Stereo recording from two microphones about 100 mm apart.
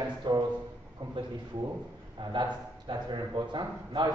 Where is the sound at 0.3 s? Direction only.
50° right (ahead or behind).